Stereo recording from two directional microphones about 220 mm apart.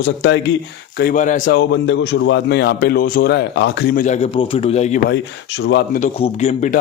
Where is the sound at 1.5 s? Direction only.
55° left (ahead or behind); by 5.0 s 30° left (ahead or behind).